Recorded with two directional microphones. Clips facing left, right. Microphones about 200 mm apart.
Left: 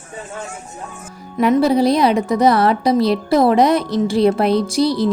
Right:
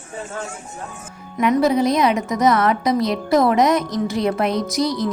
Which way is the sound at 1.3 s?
30° left (ahead or behind).